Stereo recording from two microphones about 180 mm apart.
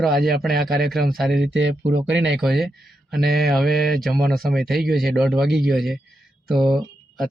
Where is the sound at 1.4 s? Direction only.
75° right (ahead or behind).